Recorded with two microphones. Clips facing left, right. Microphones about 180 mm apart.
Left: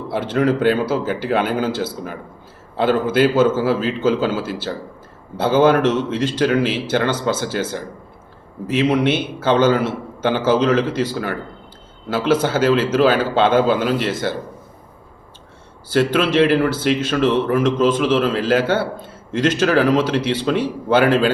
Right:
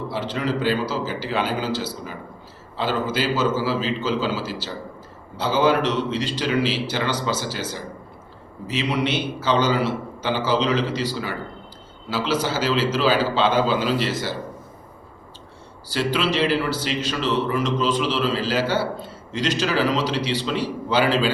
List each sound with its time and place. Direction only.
0.1 s a man's voice: 55° left (ahead or behind)
15.9 s speech: 55° left (ahead or behind)